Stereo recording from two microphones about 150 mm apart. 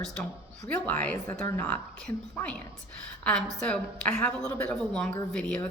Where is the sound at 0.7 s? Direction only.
10° left (ahead or behind).